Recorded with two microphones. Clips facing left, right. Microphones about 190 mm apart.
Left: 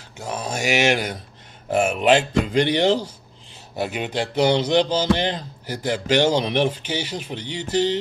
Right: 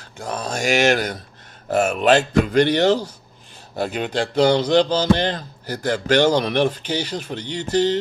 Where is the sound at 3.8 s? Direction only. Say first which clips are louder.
Right 2 dB; 10° left (ahead or behind).